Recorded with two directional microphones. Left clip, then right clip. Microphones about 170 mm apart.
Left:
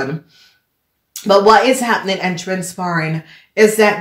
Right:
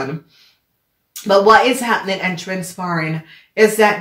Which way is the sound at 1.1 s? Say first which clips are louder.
Left 1 dB; 35° left (ahead or behind).